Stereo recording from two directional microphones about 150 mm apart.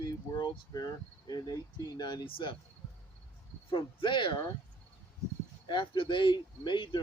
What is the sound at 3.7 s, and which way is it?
Speech, 35° left (ahead or behind).